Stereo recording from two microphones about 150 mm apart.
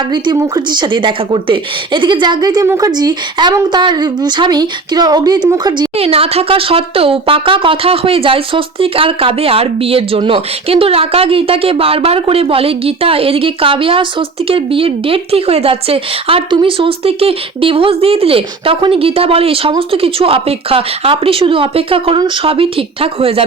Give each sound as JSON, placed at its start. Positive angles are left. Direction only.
{"t": 0.1, "sound": "a woman's voice", "side_deg": -25}
{"t": 6.0, "sound": "speech", "side_deg": -40}